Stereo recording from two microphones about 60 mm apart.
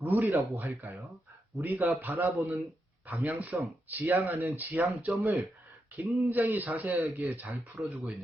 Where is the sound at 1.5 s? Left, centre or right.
Right.